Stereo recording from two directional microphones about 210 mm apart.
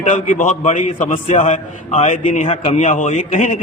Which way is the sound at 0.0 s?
35° left (ahead or behind).